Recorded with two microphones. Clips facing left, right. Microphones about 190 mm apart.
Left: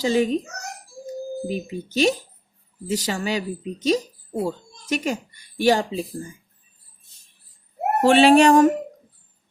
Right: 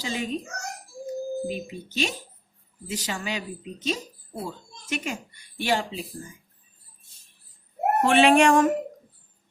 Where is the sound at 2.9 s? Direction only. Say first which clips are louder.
Left 7 dB; 40° left (ahead or behind).